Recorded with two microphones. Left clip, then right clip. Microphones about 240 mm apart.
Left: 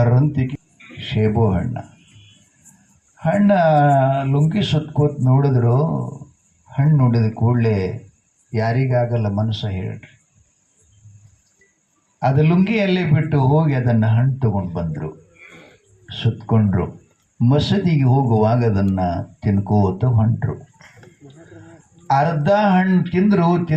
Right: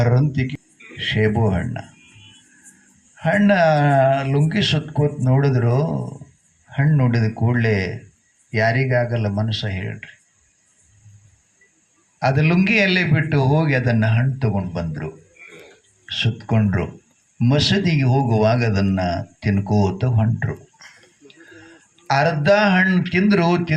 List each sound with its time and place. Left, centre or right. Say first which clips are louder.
0.0 s a man's voice: left 1 dB; right
3.2 s a man's voice: even; right
12.2 s a man's voice: even; right
15.4 s a sound: right 1 dB; left
16.0 s a man's voice: right 2 dB; right
20.7 s a sound: right 1 dB; centre
22.0 s a man's voice: even; right